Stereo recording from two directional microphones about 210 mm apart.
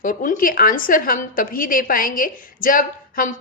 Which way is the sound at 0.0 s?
40° left (ahead or behind).